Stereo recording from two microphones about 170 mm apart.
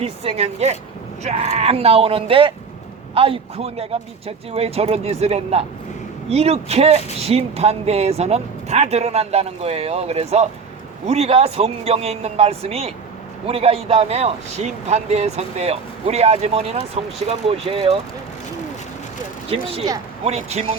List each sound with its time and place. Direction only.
0.0 s a man's voice: 35° right (ahead or behind)
19.5 s a man's voice: 35° right (ahead or behind)